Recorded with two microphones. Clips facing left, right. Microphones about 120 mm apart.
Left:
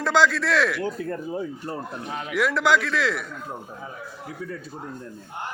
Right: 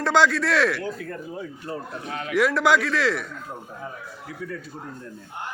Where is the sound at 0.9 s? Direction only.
30° left (ahead or behind).